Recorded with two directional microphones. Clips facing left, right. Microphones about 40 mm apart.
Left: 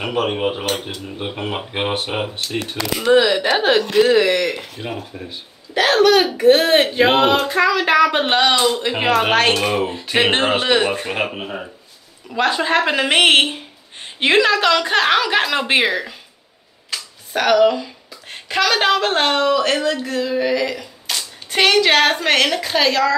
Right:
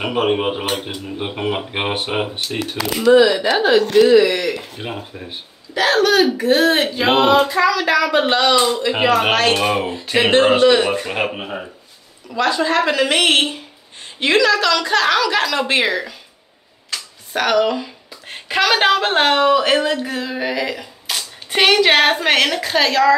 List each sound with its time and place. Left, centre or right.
0.0 s speech: centre
3.0 s speech: left
4.8 s speech: right
5.1 s speech: centre
5.8 s a woman's voice: left
9.6 s speech: centre
10.1 s a woman's voice: left
11.1 s speech: centre
12.4 s a woman's voice: left; by 16.2 s centre
16.9 s speech: centre